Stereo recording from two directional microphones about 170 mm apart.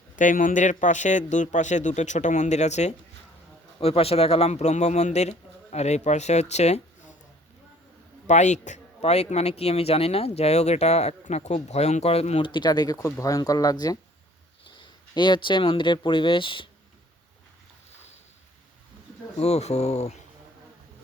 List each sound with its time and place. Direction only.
0.2 s a man's voice: 50° left (ahead or behind)
8.3 s speech: 45° left (ahead or behind); by 14.0 s 20° left (ahead or behind)
15.1 s speech: 25° left (ahead or behind)
19.4 s speech: 40° left (ahead or behind)